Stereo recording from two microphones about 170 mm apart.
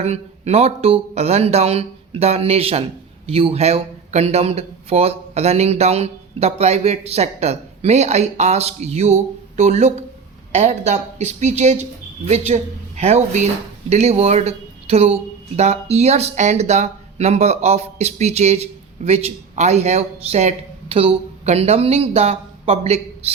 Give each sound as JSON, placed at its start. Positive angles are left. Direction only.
{"t": 0.0, "sound": "speech", "side_deg": -40}